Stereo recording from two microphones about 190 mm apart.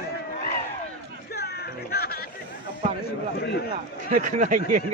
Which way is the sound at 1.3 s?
55° left (ahead or behind).